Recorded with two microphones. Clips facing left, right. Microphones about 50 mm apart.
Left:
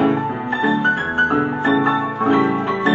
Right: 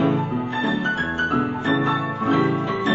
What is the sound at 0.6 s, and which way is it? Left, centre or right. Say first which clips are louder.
Music: left 7 dB; left.